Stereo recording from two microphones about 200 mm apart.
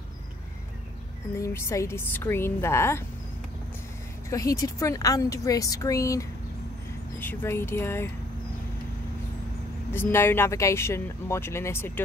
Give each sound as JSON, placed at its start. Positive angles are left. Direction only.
{"t": 1.3, "sound": "speech", "side_deg": 15}
{"t": 4.3, "sound": "speech", "side_deg": 15}
{"t": 9.9, "sound": "speech", "side_deg": 10}